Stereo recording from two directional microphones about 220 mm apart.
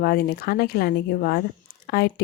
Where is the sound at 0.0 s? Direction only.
45° left (ahead or behind).